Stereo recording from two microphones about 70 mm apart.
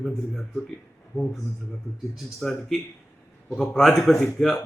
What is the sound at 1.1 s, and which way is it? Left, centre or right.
Speech, centre.